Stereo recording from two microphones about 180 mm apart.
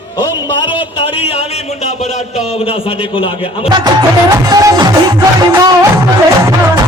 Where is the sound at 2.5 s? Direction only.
30° left (ahead or behind).